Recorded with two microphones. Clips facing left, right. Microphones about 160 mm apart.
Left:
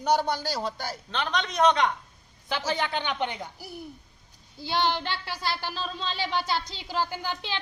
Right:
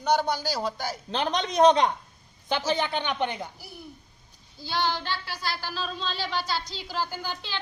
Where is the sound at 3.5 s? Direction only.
40° left (ahead or behind).